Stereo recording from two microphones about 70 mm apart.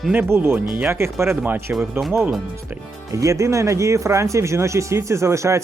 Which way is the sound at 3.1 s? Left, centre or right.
Right.